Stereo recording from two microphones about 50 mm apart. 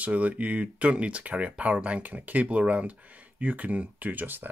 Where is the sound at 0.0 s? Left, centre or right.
Right.